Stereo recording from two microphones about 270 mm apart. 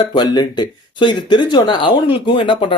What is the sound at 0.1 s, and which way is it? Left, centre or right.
Speech, centre.